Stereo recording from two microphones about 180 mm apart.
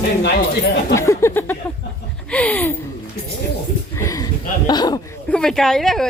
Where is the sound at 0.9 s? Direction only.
15° left (ahead or behind).